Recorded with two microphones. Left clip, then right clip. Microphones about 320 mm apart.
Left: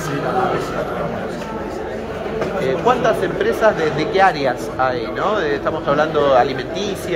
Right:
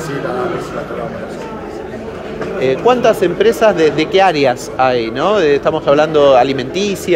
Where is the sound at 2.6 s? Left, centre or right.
Right.